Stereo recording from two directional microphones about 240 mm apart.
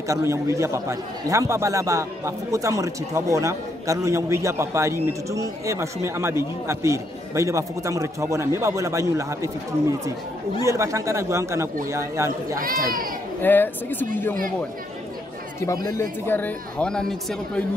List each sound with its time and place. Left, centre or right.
0.1 s a man's voice: centre
12.5 s speech: right
13.4 s speech: centre
15.6 s speech: centre